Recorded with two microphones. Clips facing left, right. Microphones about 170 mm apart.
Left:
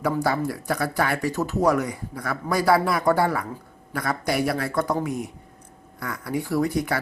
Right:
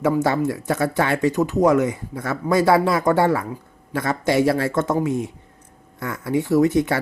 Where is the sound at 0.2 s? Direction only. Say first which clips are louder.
Right 4 dB; 20° right (ahead or behind).